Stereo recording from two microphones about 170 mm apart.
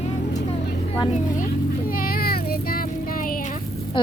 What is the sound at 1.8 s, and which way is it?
Child singing, 55° left (ahead or behind).